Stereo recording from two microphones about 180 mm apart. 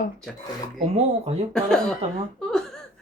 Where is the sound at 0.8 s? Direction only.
35° right (ahead or behind).